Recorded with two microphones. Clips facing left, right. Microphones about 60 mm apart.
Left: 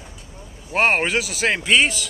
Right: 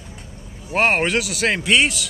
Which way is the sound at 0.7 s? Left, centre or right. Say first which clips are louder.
Right 1 dB; centre.